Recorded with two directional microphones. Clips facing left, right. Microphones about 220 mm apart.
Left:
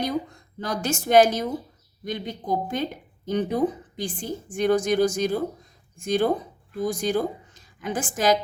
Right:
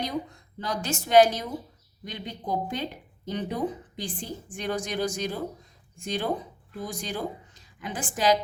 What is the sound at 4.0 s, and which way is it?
A woman's voice, 45° left (ahead or behind).